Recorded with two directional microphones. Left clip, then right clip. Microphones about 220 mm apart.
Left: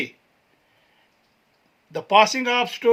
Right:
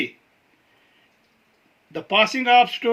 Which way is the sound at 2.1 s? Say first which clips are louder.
Even; 50° left (ahead or behind).